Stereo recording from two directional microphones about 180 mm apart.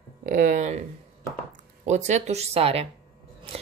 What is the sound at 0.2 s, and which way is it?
Speech, 45° right (ahead or behind).